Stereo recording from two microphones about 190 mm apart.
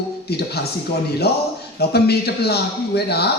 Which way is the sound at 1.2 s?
55° left (ahead or behind).